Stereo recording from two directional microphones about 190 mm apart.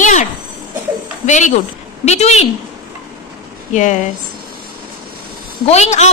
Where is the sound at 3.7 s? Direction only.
40° left (ahead or behind).